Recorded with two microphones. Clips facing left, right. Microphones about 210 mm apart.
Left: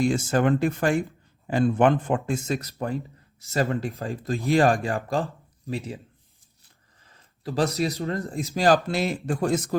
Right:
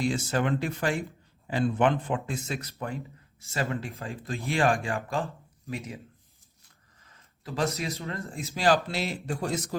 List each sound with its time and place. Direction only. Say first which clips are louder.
0.0 s speech: left 5 dB; 50° left (ahead or behind); by 6.0 s 30° left (ahead or behind)
7.0 s a sound: left 9 dB; 30° left (ahead or behind)
7.8 s speech: left 8 dB; 35° left (ahead or behind)
8.5 s speech: left 4 dB; 45° left (ahead or behind)